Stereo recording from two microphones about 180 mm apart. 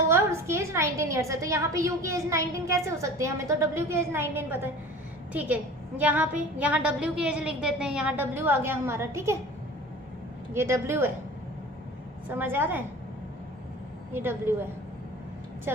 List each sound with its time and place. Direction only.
0.1 s a woman's voice: 15° right (ahead or behind)
10.5 s a woman's voice: 15° right (ahead or behind)
12.3 s a woman's voice: 10° right (ahead or behind)
14.1 s a woman's voice: 10° right (ahead or behind)